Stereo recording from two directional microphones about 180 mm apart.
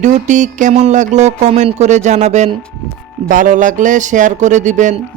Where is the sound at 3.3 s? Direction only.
45° right (ahead or behind).